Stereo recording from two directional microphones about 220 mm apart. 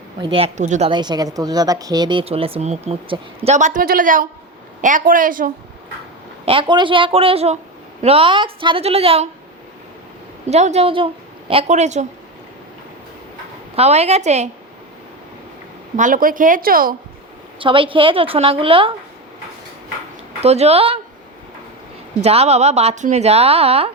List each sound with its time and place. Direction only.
0.2 s a woman's voice: 25° right (ahead or behind)
0.9 s a woman's voice: 20° right (ahead or behind); by 5.5 s 40° right (ahead or behind)
6.4 s a woman's voice: 25° right (ahead or behind)
10.5 s a woman's voice: 30° right (ahead or behind)
13.7 s a woman's voice: 30° right (ahead or behind)
16.0 s speech: 40° right (ahead or behind)
17.6 s a woman's voice: 25° right (ahead or behind)
20.4 s a woman's voice: 30° right (ahead or behind)
22.2 s a woman's voice: 30° right (ahead or behind)